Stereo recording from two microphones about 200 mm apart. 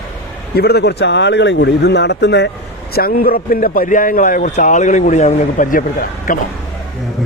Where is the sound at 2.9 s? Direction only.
50° left (ahead or behind).